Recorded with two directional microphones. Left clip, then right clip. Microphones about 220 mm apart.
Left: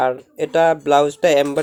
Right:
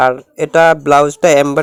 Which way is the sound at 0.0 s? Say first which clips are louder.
Right 7 dB; 25° right (ahead or behind).